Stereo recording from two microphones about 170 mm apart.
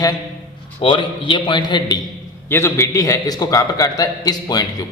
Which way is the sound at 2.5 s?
15° left (ahead or behind).